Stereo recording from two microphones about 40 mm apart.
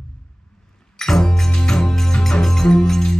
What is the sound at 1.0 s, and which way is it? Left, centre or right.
Music, centre.